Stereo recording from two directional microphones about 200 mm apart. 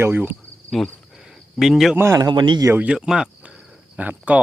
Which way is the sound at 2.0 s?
15° right (ahead or behind).